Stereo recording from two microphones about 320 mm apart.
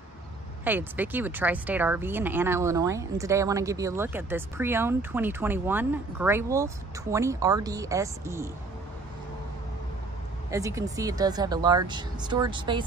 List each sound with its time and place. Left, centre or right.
0.7 s speech: centre
10.5 s speech: centre